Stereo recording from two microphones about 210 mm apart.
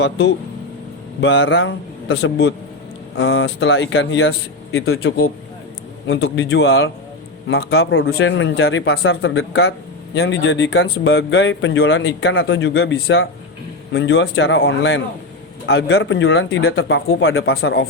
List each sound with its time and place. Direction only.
1.2 s speech: 55° left (ahead or behind); by 4.9 s 80° left
6.1 s speech: 60° left (ahead or behind)